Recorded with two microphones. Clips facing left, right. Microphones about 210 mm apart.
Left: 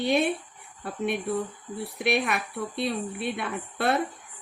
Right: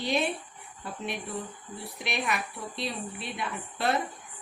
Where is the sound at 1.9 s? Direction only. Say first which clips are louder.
Left 6 dB; 55° left (ahead or behind).